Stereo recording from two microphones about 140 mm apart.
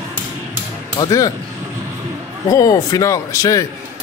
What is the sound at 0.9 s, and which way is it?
Speech, 25° left (ahead or behind).